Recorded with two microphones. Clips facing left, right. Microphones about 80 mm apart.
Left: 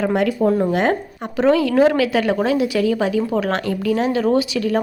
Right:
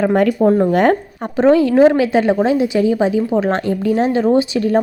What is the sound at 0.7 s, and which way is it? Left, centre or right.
Speech, right.